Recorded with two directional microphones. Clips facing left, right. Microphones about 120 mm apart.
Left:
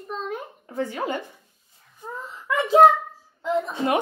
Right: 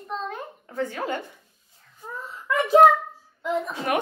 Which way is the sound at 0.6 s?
20° left (ahead or behind).